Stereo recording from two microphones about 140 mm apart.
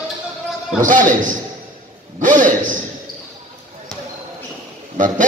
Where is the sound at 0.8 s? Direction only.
70° right (ahead or behind).